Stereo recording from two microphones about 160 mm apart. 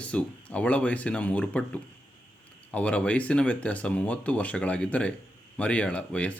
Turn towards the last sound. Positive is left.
turn(degrees=10)  # may be behind; listen again after turning